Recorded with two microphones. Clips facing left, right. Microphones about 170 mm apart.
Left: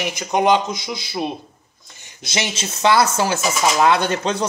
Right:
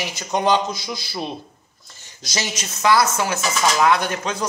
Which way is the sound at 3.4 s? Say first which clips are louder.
Left 2 dB; 5° left (ahead or behind).